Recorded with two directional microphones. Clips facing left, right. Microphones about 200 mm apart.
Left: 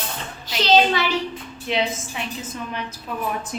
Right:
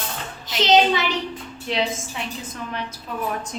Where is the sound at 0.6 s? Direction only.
20° right (ahead or behind).